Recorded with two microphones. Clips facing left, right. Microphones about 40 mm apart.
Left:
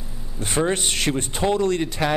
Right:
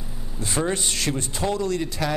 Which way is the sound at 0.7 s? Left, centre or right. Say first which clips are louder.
Left 3 dB; left.